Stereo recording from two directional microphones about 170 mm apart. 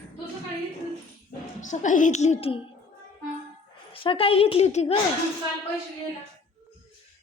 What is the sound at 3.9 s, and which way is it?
A woman's voice, 30° left (ahead or behind).